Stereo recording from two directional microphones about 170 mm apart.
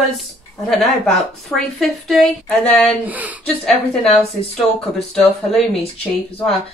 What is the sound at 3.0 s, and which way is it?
Speech, 10° right (ahead or behind).